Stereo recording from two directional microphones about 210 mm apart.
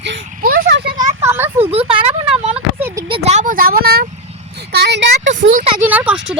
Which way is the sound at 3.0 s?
25° right (ahead or behind).